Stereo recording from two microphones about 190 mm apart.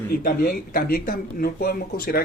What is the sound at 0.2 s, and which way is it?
Speech, 50° left (ahead or behind).